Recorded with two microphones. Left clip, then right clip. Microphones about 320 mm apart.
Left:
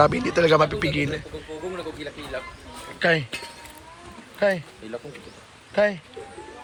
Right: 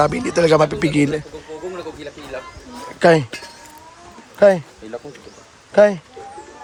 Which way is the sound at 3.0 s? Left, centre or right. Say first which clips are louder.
Right 8 dB; right.